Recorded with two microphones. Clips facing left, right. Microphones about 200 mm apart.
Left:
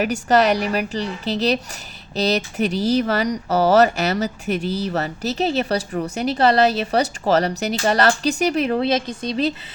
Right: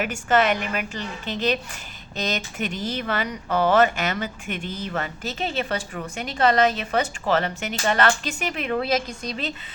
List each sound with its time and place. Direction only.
0.0 s speech: 35° left (ahead or behind)